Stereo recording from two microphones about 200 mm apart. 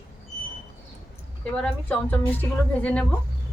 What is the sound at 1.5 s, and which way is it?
A woman's voice, 5° left (ahead or behind).